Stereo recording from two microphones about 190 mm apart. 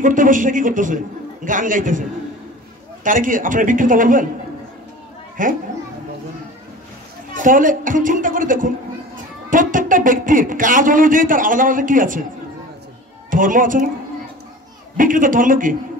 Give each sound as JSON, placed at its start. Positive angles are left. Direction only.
{"t": 0.0, "sound": "a man's voice", "side_deg": -45}
{"t": 5.4, "sound": "a man's voice", "side_deg": -45}
{"t": 7.3, "sound": "a man's voice", "side_deg": -45}
{"t": 13.3, "sound": "a man's voice", "side_deg": -45}
{"t": 15.0, "sound": "a man's voice", "side_deg": -45}